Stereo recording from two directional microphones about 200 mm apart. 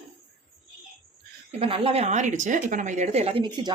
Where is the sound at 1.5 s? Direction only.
30° right (ahead or behind).